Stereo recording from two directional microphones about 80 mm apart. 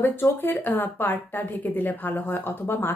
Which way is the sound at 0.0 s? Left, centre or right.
Left.